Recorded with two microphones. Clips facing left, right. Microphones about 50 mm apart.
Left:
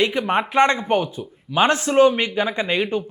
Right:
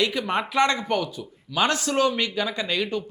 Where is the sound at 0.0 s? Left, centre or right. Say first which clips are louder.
Left 4 dB; left.